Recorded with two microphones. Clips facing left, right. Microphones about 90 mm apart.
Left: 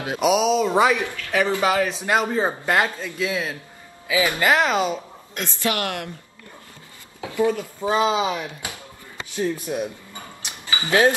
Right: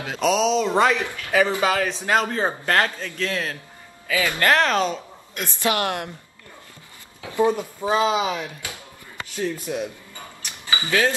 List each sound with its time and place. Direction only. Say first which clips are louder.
0.0 s a man's voice: left 1 dB; 15° left (ahead or behind)
5.4 s speech: right 2 dB; 20° right (ahead or behind)
7.3 s speech: right 1 dB; 20° right (ahead or behind)
8.2 s speech: left 1 dB; 15° left (ahead or behind)
10.4 s a sound: right 1 dB; 20° left (ahead or behind)